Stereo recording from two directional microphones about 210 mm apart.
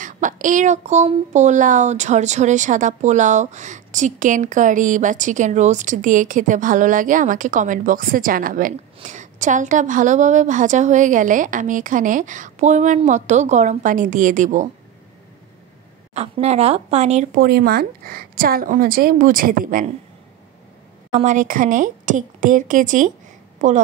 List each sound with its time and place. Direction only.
0.0 s speech: 40° right (ahead or behind)
16.2 s speech: 30° right (ahead or behind)
21.1 s speech: 35° right (ahead or behind)